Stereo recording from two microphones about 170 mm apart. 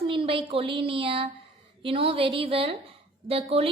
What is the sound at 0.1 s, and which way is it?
A woman's voice, 30° right (ahead or behind).